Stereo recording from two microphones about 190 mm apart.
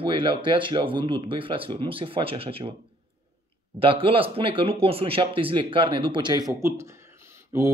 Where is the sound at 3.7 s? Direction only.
30° right (ahead or behind).